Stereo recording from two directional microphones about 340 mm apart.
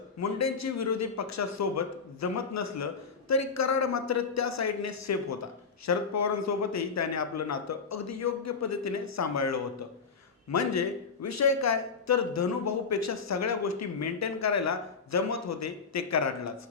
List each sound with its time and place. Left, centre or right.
0.2 s speech: left